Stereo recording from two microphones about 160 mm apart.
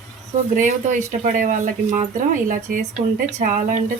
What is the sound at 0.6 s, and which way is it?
Speech, 55° right (ahead or behind).